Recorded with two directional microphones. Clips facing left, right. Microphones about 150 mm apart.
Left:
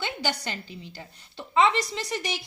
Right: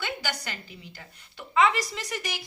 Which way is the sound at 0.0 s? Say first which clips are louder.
Left 3 dB; 25° left (ahead or behind).